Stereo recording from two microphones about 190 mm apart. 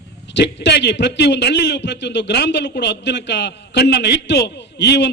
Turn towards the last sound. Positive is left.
turn(degrees=60)  # may be behind; listen again after turning